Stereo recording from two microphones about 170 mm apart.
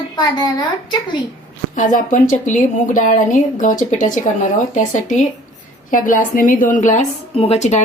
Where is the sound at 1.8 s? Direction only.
50° left (ahead or behind).